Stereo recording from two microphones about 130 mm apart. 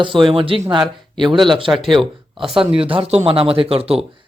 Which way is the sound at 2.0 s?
5° right (ahead or behind).